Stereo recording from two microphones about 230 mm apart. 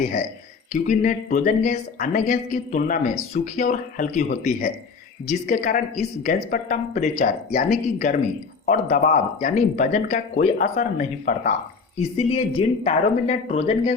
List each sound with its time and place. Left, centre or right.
0.0 s speech: left